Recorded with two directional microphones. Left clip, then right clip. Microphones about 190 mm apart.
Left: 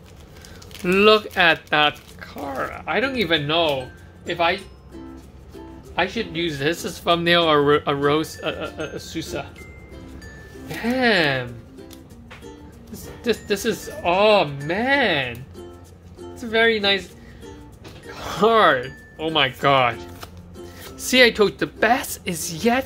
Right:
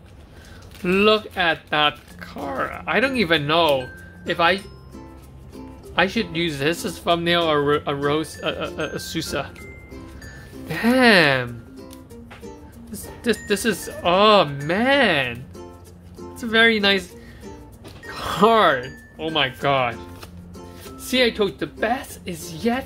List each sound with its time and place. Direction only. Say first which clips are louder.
0.8 s speech: left 2 dB; centre (ahead or behind); by 4.6 s 35° right (ahead or behind)
5.9 s speech: right 2 dB; 35° right (ahead or behind); by 7.1 s 15° right (ahead or behind)
7.1 s speech: left 2 dB; centre (ahead or behind); by 9.5 s 30° right (ahead or behind)
10.7 s speech: right 4 dB; 25° right (ahead or behind)
12.9 s speech: even; 15° right (ahead or behind)
16.3 s speech: right 2 dB; 25° right (ahead or behind)
18.1 s a sound: right 2 dB; 20° right (ahead or behind)
18.5 s speech: left 4 dB; 5° right (ahead or behind)
21.1 s a woman's voice: left 4 dB; 10° left (ahead or behind)